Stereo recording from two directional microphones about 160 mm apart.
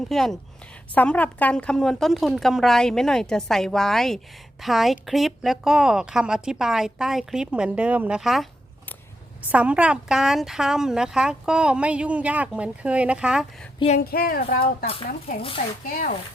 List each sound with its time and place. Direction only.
0.1 s a woman's voice: centre (ahead or behind)
9.5 s a woman's voice: 10° right (ahead or behind)
13.7 s speech: 40° left (ahead or behind)
14.0 s speech: 70° left (ahead or behind)
15.4 s speech: 35° left (ahead or behind)
15.9 s speech: 65° left (ahead or behind)